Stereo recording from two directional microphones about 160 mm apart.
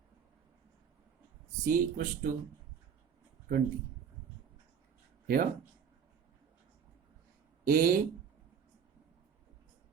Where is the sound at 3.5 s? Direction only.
90° right.